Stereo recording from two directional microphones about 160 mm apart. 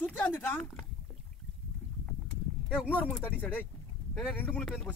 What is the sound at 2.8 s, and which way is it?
Speech, 10° left (ahead or behind).